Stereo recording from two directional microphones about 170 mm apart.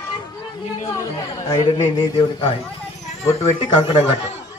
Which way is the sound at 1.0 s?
20° left (ahead or behind).